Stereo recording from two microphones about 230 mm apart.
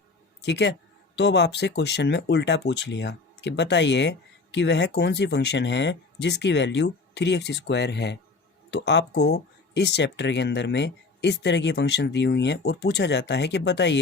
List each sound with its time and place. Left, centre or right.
0.4 s speech: left